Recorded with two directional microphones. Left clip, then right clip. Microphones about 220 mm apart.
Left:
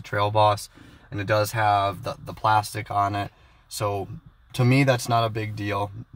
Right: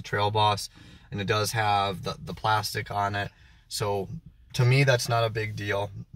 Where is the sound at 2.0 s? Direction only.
45° left (ahead or behind).